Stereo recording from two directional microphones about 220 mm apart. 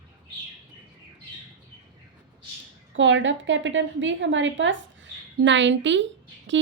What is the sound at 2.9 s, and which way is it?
A woman's voice, 55° right (ahead or behind).